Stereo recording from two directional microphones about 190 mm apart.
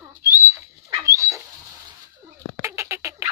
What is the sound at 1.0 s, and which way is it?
Dog, 15° right (ahead or behind).